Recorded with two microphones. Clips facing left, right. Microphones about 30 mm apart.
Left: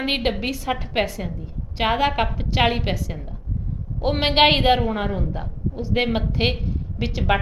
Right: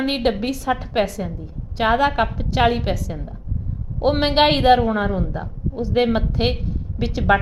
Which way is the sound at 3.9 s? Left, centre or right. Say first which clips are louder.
Right 4 dB; centre.